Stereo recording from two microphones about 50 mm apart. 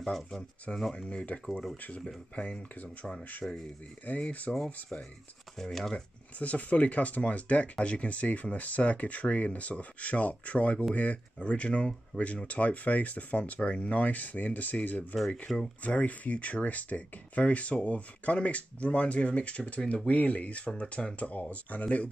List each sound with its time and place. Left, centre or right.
0.0 s speech: centre
0.9 s speech: left
1.4 s speech: centre
1.8 s speech: left
5.6 s speech: centre
6.4 s speech: left
15.4 s speech: centre
15.8 s speech: left